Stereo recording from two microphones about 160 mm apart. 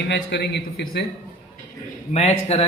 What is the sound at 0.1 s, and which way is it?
Speech, 90° left.